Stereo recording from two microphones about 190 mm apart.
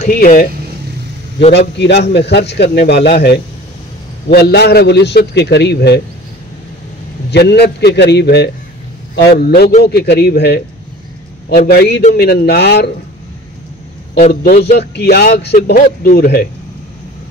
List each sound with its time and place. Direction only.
0.0 s speech: 45° left (ahead or behind)
1.8 s speech: 60° left (ahead or behind)
7.2 s speech: 60° left (ahead or behind)
14.1 s speech: 50° left (ahead or behind)